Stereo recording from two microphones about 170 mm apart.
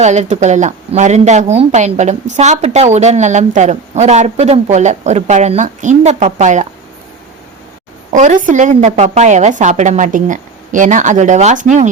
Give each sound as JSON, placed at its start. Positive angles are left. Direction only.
{"t": 0.0, "sound": "a woman's voice", "side_deg": -40}
{"t": 8.1, "sound": "a woman's voice", "side_deg": -45}